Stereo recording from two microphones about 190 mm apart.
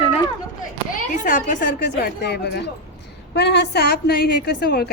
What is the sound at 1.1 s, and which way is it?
A woman's voice, 45° left (ahead or behind).